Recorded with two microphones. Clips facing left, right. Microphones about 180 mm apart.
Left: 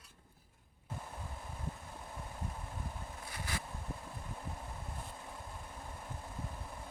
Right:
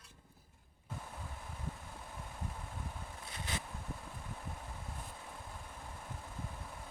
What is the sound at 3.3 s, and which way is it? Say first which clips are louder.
Vehicle: even; 20° right (ahead or behind).